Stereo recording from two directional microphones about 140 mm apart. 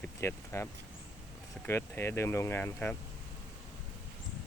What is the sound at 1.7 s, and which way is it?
Speech, 15° left (ahead or behind).